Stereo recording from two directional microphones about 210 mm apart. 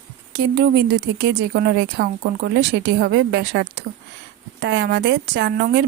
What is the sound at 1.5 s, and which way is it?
Speech, 50° right (ahead or behind).